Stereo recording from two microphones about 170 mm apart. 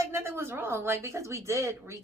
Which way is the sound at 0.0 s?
15° right (ahead or behind).